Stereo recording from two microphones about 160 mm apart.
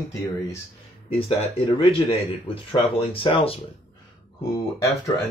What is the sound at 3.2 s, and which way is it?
Speech, 35° left (ahead or behind).